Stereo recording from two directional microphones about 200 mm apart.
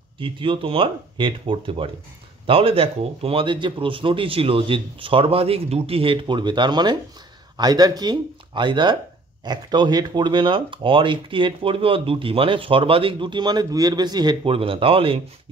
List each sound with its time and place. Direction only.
0.2 s speech: 25° right (ahead or behind)